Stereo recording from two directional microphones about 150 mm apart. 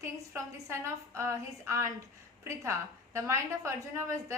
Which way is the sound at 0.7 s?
15° right (ahead or behind).